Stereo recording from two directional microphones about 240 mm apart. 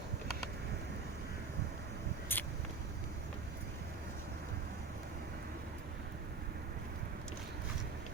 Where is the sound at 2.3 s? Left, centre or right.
Centre.